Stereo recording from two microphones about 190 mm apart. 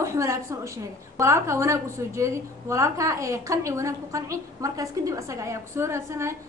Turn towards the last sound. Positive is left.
turn(degrees=-15)  # may be behind; listen again after turning